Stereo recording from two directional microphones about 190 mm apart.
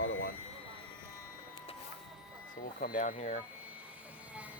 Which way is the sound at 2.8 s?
45° left (ahead or behind).